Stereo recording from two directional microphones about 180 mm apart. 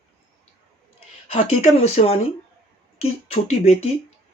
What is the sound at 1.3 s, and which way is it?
Speech, 40° left (ahead or behind).